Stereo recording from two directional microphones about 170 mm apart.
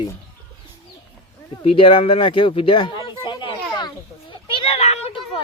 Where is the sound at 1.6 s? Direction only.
35° left (ahead or behind).